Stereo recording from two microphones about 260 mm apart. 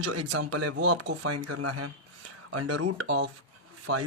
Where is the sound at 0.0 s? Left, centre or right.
Right.